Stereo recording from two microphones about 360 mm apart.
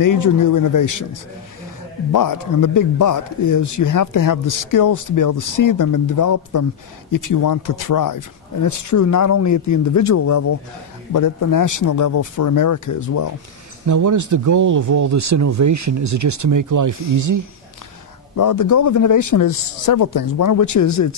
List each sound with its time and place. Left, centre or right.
0.0 s speech: left
13.8 s speech: right
18.3 s speech: left